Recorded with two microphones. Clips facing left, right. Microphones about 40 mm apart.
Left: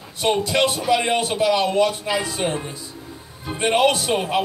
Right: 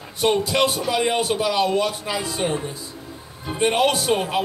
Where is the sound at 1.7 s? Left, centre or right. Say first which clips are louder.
Left 3 dB; left.